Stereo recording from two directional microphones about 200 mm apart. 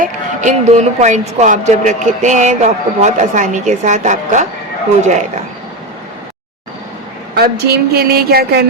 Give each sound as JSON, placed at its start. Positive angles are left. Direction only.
{"t": 0.0, "sound": "speech", "side_deg": -35}
{"t": 7.3, "sound": "speech", "side_deg": -50}